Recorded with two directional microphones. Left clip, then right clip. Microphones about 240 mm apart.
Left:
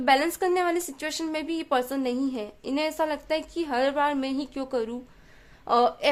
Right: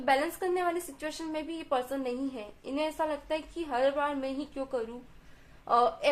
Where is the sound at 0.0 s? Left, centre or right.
Left.